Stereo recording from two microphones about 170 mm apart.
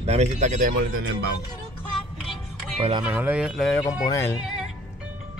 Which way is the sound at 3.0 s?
10° right (ahead or behind).